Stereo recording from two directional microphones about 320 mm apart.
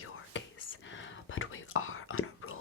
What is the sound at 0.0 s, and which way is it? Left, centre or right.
Whispering, left.